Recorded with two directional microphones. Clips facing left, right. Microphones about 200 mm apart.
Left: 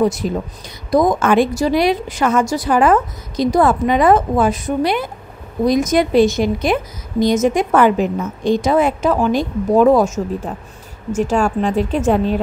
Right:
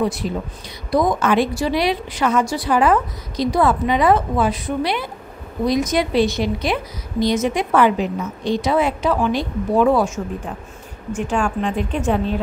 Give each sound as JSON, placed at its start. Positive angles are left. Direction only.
{"t": 0.0, "sound": "a woman's voice", "side_deg": 45}